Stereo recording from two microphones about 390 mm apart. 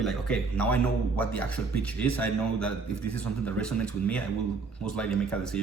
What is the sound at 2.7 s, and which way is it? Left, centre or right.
Speech, left.